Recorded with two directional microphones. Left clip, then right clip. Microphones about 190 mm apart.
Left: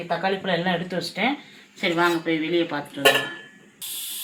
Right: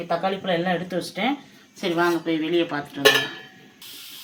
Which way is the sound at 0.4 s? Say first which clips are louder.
Even; 5° right (ahead or behind).